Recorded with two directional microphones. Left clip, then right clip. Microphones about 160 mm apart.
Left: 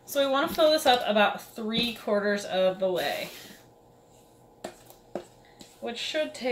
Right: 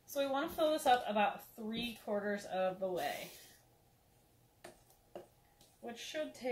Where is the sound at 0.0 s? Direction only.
25° left (ahead or behind).